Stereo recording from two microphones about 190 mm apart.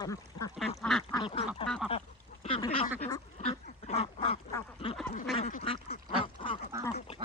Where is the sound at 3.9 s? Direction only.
30° left (ahead or behind).